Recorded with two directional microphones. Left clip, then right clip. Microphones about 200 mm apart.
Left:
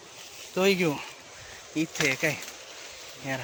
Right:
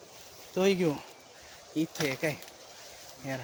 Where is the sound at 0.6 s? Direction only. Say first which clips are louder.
Left 3 dB; 10° right (ahead or behind).